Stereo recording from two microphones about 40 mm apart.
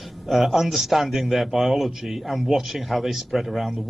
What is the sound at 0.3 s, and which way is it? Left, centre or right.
A man's voice, centre.